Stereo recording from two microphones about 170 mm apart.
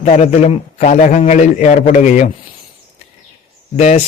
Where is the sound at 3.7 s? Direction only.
40° left (ahead or behind).